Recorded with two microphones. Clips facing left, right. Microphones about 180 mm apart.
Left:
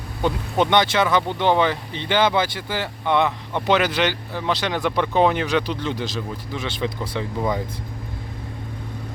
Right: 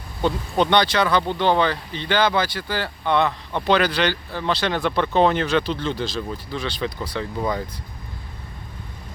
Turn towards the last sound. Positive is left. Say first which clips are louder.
# left 1 dB
turn(degrees=15)  # may be behind; listen again after turning